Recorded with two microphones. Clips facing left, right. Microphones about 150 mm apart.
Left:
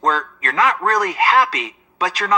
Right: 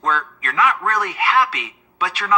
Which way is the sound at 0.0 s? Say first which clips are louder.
Left 3 dB; 35° left (ahead or behind).